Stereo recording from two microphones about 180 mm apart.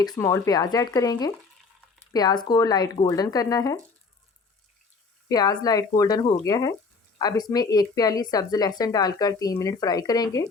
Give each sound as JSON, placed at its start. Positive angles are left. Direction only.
{"t": 0.0, "sound": "speech", "side_deg": 20}
{"t": 5.3, "sound": "speech", "side_deg": 20}